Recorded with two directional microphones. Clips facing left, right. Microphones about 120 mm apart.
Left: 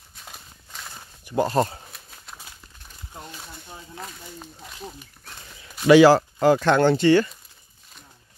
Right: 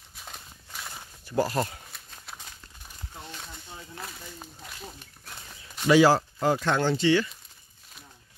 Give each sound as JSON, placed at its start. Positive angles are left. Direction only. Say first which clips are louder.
{"t": 0.1, "sound": "horse", "louder": "even", "side_deg": 0}
{"t": 1.2, "sound": "speech", "louder": "left 3 dB", "side_deg": 20}
{"t": 1.9, "sound": "a sound", "louder": "left 1 dB", "side_deg": 5}
{"t": 5.9, "sound": "speech", "louder": "left 6 dB", "side_deg": 80}